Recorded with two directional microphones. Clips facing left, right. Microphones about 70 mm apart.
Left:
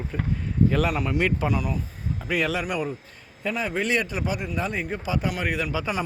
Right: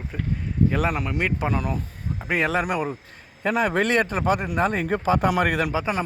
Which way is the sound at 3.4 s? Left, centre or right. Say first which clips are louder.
Right 5 dB; right.